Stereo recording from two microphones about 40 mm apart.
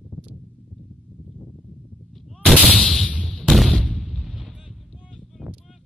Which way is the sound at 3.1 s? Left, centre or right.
Left.